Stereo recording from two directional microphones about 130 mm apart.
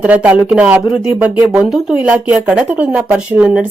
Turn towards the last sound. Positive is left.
turn(degrees=-10)  # may be behind; listen again after turning